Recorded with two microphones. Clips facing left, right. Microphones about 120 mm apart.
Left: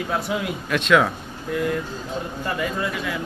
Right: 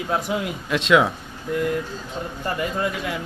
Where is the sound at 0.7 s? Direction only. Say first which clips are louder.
Right 1 dB; 25° right (ahead or behind).